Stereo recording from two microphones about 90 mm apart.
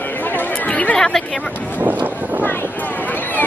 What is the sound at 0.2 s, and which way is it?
Chatter, 20° left (ahead or behind).